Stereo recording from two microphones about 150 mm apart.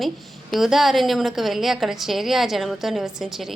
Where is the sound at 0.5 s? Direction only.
Centre (ahead or behind).